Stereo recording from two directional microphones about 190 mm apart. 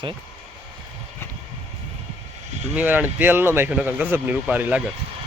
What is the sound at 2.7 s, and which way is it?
Speech, 10° right (ahead or behind).